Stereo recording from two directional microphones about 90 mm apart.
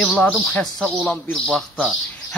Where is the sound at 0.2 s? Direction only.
15° left (ahead or behind).